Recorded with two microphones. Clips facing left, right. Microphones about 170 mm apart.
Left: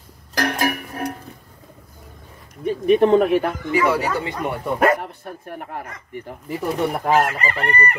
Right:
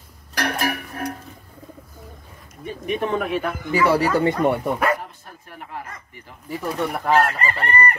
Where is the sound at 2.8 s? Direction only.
35° left (ahead or behind).